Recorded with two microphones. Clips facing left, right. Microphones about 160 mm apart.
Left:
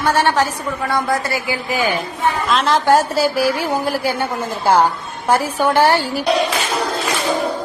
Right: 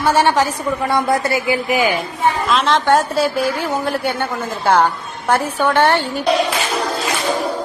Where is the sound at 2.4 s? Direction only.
Centre (ahead or behind).